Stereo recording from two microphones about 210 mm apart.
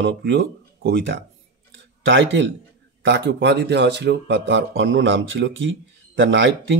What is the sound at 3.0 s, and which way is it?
A man's voice, 60° right (ahead or behind).